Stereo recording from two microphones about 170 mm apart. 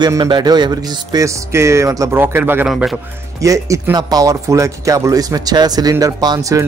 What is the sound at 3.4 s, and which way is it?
Speech, 20° right (ahead or behind).